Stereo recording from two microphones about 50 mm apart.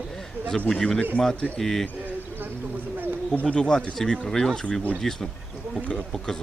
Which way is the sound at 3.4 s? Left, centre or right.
Centre.